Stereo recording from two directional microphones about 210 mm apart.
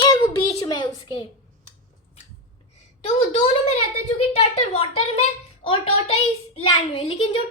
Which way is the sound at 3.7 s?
30° left (ahead or behind).